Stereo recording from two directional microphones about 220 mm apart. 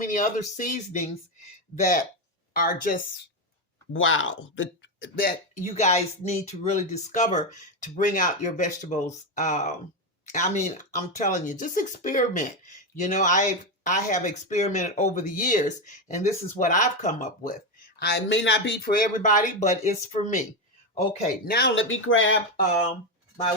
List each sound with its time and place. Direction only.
0.0 s speech: 35° left (ahead or behind)
3.9 s speech: 60° left (ahead or behind)
5.7 s speech: 30° left (ahead or behind)
18.0 s speech: 55° left (ahead or behind); by 20.4 s 35° left (ahead or behind)
21.4 s speech: 45° left (ahead or behind); by 22.4 s 65° left (ahead or behind)